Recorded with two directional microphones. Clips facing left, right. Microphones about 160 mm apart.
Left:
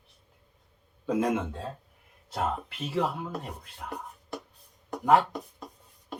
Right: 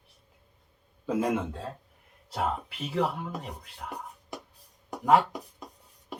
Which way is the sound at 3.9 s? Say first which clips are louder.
Left 3 dB; 10° right (ahead or behind).